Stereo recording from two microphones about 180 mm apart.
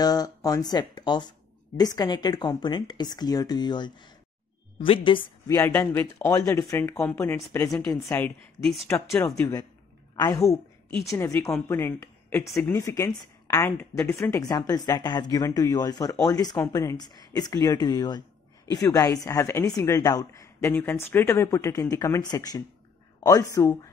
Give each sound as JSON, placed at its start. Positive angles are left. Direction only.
{"t": 0.0, "sound": "a woman's voice", "side_deg": 20}
{"t": 5.6, "sound": "a woman's voice", "side_deg": 10}